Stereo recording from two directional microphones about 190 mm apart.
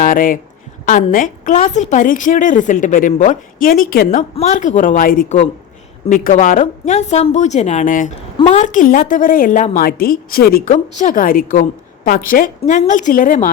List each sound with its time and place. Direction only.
0.0 s a woman's voice: 45° left (ahead or behind)
9.8 s a woman's voice: 50° left (ahead or behind)
10.7 s a woman's voice: 40° left (ahead or behind)